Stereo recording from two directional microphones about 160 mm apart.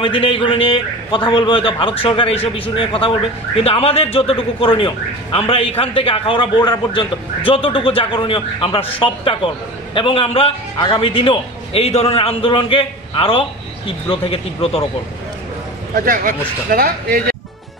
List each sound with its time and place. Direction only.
0.0 s a man's voice: 35° left (ahead or behind)
3.5 s a man's voice: 35° left (ahead or behind)
16.1 s speech: 65° right (ahead or behind)